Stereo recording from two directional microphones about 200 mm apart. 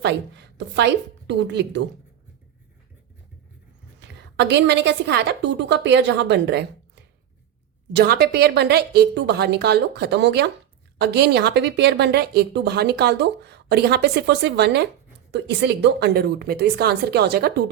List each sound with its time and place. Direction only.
0.0 s speech: 60° right (ahead or behind)
4.4 s speech: 60° right (ahead or behind)